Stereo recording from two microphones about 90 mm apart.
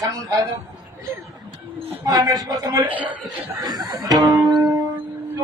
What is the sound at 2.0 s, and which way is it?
Speech, 40° right (ahead or behind).